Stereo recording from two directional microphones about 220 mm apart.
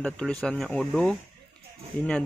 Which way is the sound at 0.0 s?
5° left (ahead or behind).